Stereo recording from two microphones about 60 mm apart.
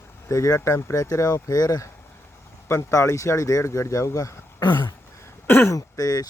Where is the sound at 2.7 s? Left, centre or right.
Left.